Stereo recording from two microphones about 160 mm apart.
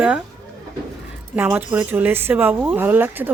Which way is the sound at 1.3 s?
10° right (ahead or behind).